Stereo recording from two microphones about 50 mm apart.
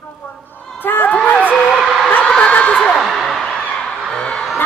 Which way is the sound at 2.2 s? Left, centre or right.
Left.